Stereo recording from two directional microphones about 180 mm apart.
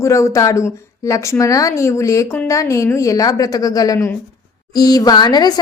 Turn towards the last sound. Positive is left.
turn(degrees=25)  # may be behind; listen again after turning